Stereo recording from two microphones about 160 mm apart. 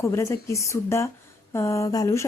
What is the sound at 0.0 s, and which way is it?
Speech, 15° left (ahead or behind).